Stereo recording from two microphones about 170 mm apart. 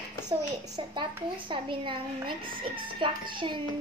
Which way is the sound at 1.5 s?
30° right (ahead or behind).